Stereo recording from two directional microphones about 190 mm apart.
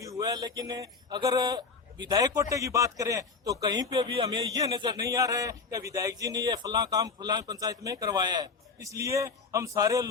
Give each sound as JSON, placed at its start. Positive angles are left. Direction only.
{"t": 0.0, "sound": "speech", "side_deg": -20}